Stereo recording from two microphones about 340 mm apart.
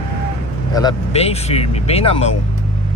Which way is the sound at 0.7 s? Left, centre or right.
Centre.